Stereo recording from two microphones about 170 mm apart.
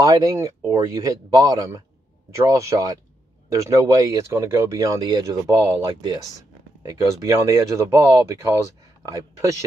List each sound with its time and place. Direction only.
0.0 s speech: 20° right (ahead or behind)